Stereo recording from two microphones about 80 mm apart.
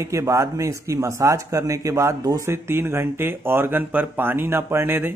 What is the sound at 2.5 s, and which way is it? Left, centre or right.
Speech, right.